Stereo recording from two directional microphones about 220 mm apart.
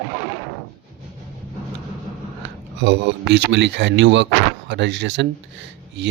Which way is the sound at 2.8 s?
55° right (ahead or behind).